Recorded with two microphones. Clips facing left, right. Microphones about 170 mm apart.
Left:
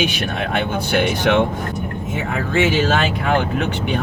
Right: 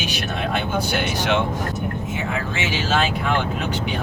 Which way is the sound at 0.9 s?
55° left (ahead or behind).